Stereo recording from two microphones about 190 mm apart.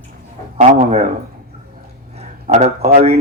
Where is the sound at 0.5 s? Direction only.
35° right (ahead or behind).